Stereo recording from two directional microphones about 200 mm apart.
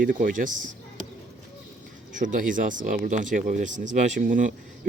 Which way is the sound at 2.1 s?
40° right (ahead or behind).